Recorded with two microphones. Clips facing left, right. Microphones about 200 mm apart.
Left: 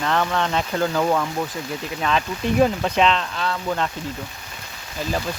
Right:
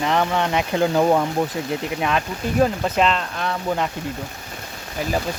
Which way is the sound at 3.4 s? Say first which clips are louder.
Right 1 dB; 15° right (ahead or behind).